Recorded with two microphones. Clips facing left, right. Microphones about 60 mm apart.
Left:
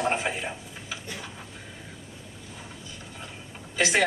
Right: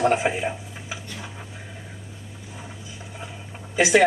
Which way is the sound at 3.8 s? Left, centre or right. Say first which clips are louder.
Right 5 dB; centre.